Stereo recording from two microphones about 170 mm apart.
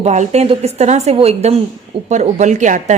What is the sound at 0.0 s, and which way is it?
A woman's voice, 40° right (ahead or behind).